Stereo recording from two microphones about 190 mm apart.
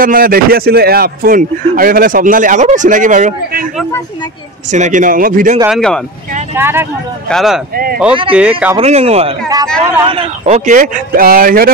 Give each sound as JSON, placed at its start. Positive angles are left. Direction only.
{"t": 0.0, "sound": "speech", "side_deg": -50}
{"t": 4.6, "sound": "speech", "side_deg": -40}
{"t": 5.7, "sound": "speech", "side_deg": 0}
{"t": 6.5, "sound": "speech", "side_deg": -10}
{"t": 7.2, "sound": "speech", "side_deg": 0}
{"t": 7.7, "sound": "speech", "side_deg": -50}
{"t": 8.3, "sound": "speech", "side_deg": -5}
{"t": 8.7, "sound": "speech", "side_deg": -35}